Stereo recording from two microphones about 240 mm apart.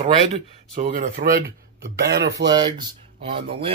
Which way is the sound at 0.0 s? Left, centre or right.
Right.